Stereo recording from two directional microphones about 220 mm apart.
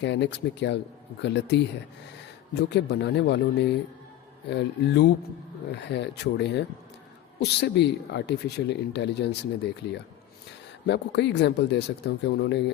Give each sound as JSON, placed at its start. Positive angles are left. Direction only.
{"t": 0.0, "sound": "speech", "side_deg": 55}
{"t": 10.8, "sound": "speech", "side_deg": 50}